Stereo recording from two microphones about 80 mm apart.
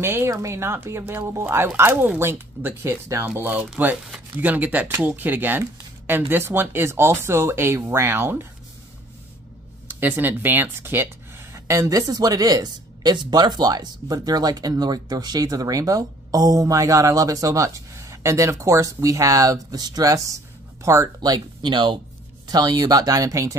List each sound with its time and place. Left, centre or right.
0.0 s a woman's voice: right
3.3 s speech: right
9.8 s speech: right
12.1 s a woman's voice: right
21.3 s speech: right
22.5 s speech: right